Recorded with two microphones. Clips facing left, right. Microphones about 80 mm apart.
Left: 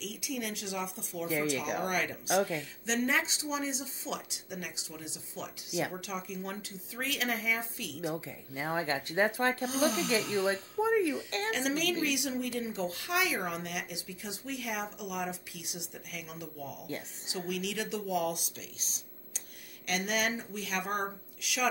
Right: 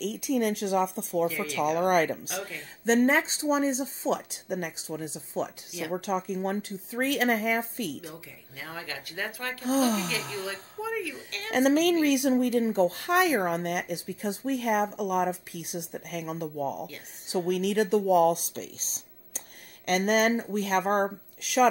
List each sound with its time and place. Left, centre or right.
0.0 s speech: right
8.0 s speech: left
9.7 s speech: right
10.3 s speech: left
10.8 s a sound: left
11.5 s speech: right